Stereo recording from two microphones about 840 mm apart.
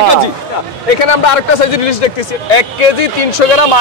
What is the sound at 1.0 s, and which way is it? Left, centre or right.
A man's voice, left.